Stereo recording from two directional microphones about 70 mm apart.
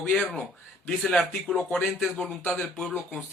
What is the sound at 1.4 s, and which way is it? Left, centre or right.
Speech, centre.